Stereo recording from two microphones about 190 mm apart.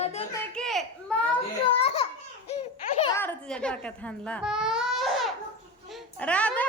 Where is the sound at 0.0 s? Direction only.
35° left (ahead or behind).